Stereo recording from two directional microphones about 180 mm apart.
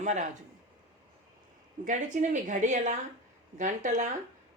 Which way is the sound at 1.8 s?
45° right (ahead or behind).